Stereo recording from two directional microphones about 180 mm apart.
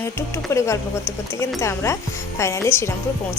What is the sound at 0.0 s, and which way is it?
Speech, 15° left (ahead or behind).